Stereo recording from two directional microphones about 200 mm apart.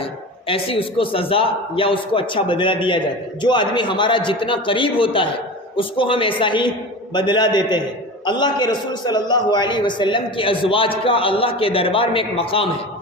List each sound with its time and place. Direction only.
0.0 s a man's voice: 25° left (ahead or behind)